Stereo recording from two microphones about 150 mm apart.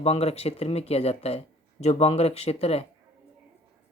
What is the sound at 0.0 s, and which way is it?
Speech, 45° left (ahead or behind).